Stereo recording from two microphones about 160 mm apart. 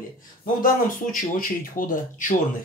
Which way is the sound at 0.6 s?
60° left (ahead or behind).